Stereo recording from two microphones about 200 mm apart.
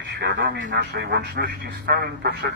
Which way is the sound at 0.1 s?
60° right (ahead or behind).